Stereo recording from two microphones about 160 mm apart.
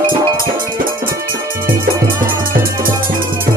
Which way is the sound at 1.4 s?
20° right (ahead or behind).